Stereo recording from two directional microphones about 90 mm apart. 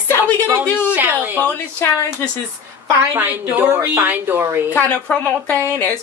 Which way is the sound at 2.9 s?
25° right (ahead or behind).